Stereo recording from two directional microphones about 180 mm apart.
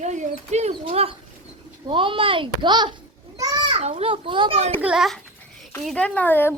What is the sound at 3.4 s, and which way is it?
Children playing, 20° right (ahead or behind).